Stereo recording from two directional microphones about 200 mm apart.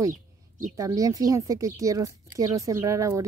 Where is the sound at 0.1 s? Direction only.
40° right (ahead or behind).